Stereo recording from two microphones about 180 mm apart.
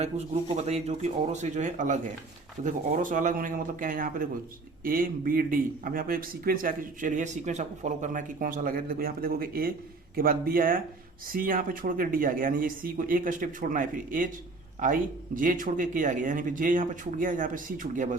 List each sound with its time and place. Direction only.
0.5 s a man's voice: 35° right (ahead or behind)